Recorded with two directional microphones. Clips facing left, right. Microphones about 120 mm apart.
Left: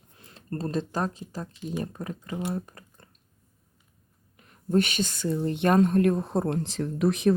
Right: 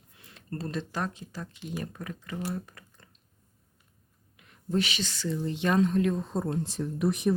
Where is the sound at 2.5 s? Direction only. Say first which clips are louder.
Left 3 dB; 35° left (ahead or behind).